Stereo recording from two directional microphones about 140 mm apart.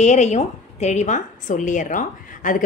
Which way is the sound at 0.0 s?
55° left (ahead or behind).